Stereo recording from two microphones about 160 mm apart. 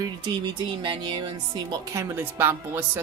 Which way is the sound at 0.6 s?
30° right (ahead or behind).